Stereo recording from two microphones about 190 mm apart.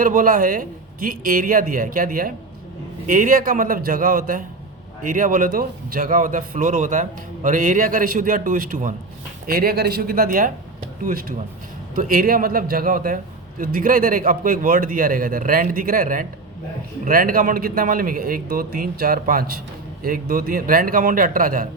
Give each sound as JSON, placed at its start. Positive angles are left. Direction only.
{"t": 0.0, "sound": "a man's voice", "side_deg": -45}